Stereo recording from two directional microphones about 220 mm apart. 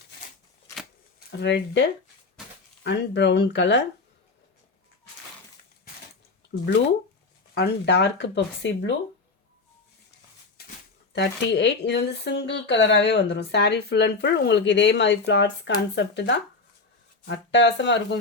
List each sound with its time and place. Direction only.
1.4 s speech: 50° left (ahead or behind)
7.5 s speech: 50° left (ahead or behind)
11.1 s speech: 55° left (ahead or behind)